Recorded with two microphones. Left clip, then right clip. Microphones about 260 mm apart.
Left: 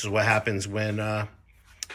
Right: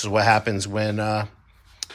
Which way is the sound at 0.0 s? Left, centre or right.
Centre.